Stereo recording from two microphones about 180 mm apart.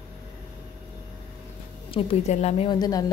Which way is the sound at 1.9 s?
35° left (ahead or behind).